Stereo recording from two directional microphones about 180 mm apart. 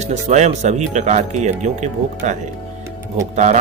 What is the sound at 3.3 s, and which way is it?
Speech, 40° right (ahead or behind).